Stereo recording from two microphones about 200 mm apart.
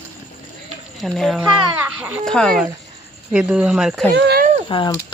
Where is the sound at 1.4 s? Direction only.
10° right (ahead or behind).